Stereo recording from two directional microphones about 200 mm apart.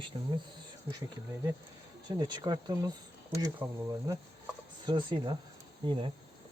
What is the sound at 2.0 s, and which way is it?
Speech, 20° right (ahead or behind).